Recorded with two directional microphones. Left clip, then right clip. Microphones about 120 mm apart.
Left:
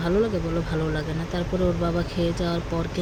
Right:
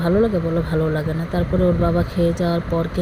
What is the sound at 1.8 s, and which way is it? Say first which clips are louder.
Speech: right 6 dB; 30° right (ahead or behind).